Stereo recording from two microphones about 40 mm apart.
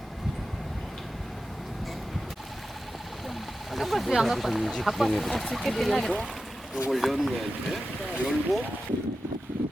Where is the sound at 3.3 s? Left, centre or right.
Centre.